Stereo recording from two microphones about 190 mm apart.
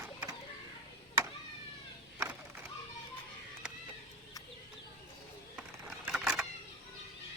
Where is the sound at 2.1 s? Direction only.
10° right (ahead or behind).